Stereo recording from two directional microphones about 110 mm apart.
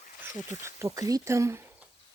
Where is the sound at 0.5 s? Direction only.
25° right (ahead or behind).